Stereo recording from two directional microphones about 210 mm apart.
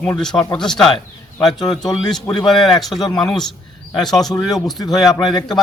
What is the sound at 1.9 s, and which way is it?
Speech, centre (ahead or behind).